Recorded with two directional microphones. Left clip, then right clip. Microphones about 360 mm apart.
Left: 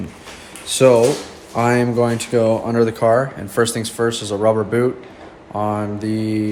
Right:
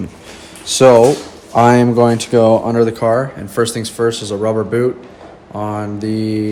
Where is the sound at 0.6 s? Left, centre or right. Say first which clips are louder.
Right 5 dB; centre.